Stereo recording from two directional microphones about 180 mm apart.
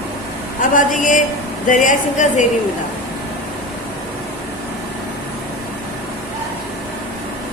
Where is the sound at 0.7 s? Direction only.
45° left (ahead or behind).